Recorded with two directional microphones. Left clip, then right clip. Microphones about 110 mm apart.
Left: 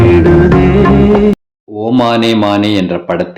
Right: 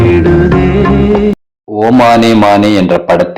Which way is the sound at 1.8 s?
25° right (ahead or behind).